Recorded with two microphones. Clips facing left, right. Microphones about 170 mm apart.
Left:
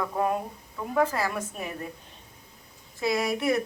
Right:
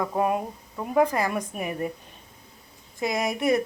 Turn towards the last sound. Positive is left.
turn(degrees=-20)  # may be behind; listen again after turning